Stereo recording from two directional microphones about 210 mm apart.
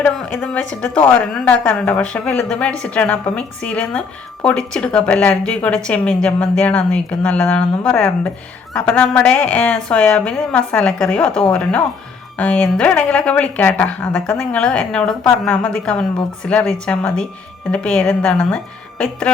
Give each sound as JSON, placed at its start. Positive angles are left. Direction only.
{"t": 0.0, "sound": "a woman's voice", "side_deg": 5}